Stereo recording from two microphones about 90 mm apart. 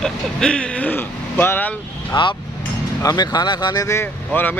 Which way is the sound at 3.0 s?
45° left (ahead or behind).